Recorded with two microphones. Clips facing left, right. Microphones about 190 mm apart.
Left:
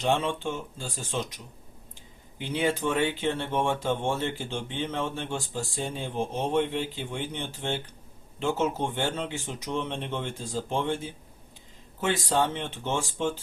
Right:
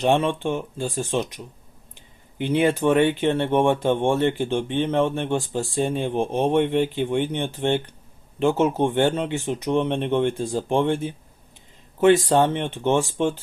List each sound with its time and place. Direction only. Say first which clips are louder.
0.0 s speech: right 6 dB; 60° right (ahead or behind)